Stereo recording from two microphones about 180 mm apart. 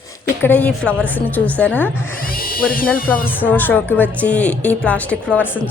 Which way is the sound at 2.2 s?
55° left (ahead or behind).